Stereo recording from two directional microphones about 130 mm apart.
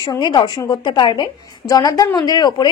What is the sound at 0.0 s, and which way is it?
A woman's voice, 35° left (ahead or behind).